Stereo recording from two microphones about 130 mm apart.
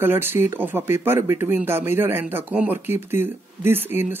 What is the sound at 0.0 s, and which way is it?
Speech, 15° right (ahead or behind).